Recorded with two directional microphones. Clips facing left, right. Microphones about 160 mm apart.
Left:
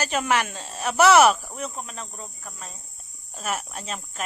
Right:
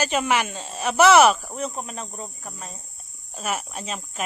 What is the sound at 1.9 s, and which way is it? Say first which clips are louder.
Speech: right 4 dB; 35° right (ahead or behind).